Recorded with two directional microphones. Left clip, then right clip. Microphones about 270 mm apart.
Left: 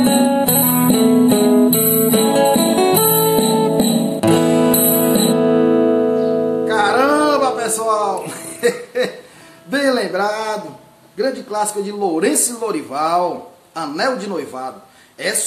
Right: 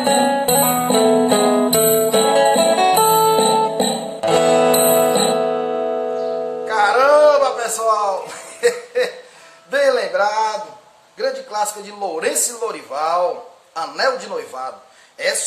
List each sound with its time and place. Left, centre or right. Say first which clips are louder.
0.0 s music: even; left
6.7 s a sound: right 3 dB; centre
11.1 s a man's voice: left 2 dB; centre